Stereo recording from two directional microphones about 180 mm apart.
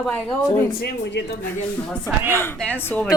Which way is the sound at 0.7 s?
65° left (ahead or behind).